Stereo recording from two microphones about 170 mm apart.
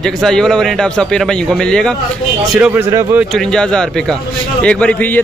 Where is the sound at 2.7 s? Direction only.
15° right (ahead or behind).